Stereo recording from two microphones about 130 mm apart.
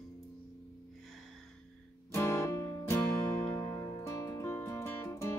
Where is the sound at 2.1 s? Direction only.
20° left (ahead or behind).